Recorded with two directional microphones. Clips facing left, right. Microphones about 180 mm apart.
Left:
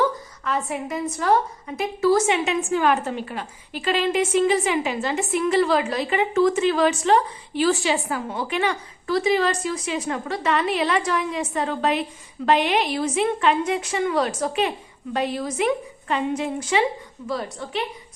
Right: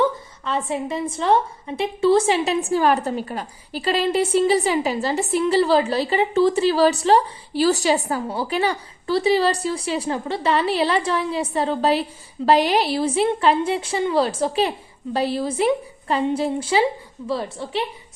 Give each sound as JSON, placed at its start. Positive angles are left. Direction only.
{"t": 0.0, "sound": "a woman's voice", "side_deg": -30}